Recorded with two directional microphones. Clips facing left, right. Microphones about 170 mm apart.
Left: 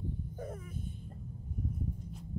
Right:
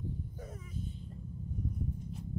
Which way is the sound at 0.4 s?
55° left (ahead or behind).